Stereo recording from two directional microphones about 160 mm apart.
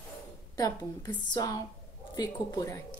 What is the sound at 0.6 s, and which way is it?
A woman's voice, 25° left (ahead or behind).